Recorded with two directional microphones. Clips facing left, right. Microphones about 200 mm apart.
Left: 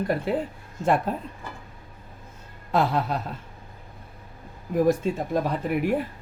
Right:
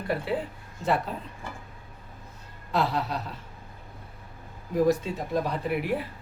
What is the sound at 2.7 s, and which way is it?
Speech, 50° left (ahead or behind).